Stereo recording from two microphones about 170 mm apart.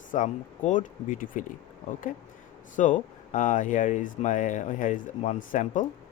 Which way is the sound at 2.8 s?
50° left (ahead or behind).